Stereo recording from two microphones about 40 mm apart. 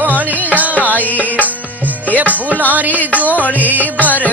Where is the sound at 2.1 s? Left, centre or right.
Right.